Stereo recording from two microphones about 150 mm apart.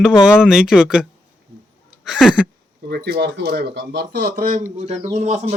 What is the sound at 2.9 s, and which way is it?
Speech, 90° right.